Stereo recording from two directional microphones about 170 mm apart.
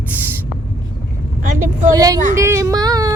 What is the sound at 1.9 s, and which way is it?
Speech, 20° right (ahead or behind).